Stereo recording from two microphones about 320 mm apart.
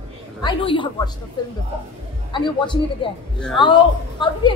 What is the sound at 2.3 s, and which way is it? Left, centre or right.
A woman's voice, centre.